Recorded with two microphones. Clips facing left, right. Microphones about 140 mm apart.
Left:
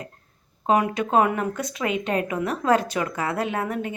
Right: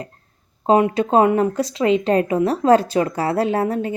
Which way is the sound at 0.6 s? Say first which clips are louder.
Right 6 dB; 30° right (ahead or behind).